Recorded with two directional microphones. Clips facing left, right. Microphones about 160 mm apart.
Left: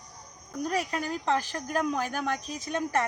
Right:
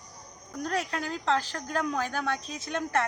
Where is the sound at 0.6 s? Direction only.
10° left (ahead or behind).